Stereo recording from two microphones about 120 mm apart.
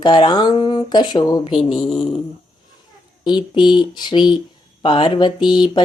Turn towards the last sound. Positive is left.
turn(degrees=40)  # may be behind; listen again after turning